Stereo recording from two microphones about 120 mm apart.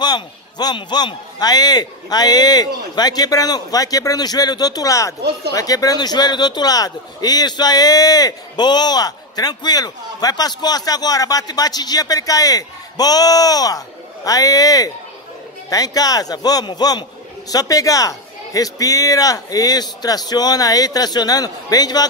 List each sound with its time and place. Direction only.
0.0 s a man's voice: 35° left (ahead or behind)